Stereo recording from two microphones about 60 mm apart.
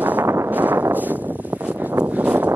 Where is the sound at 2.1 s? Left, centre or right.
Right.